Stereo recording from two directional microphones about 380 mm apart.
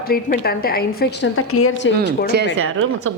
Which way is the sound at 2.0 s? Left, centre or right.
Right.